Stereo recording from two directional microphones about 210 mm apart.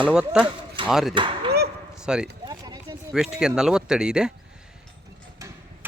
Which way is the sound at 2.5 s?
20° right (ahead or behind).